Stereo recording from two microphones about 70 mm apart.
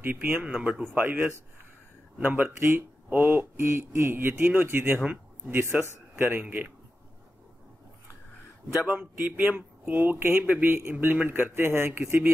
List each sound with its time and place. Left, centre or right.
0.0 s a man's voice: right
4.9 s a man's voice: centre
5.5 s speech: right
9.4 s speech: right